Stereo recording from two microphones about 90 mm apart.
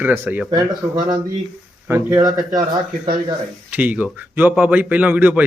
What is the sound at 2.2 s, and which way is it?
Speech, 45° right (ahead or behind).